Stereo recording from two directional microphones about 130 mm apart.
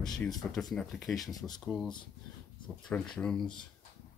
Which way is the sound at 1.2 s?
30° left (ahead or behind).